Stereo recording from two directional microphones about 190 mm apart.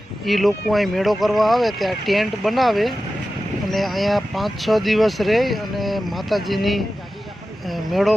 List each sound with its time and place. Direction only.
0.3 s speech: centre (ahead or behind)